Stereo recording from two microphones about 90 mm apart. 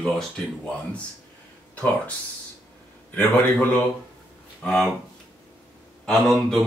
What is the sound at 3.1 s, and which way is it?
A man's voice, 20° left (ahead or behind).